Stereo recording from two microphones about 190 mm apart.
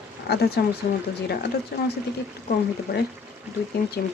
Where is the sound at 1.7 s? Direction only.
55° left (ahead or behind).